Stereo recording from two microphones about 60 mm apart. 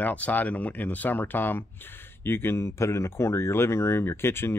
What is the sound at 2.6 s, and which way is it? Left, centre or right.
Speech, left.